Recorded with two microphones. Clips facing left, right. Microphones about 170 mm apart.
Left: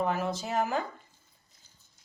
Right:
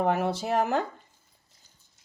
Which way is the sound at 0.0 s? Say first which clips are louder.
Right 4 dB; 65° right (ahead or behind).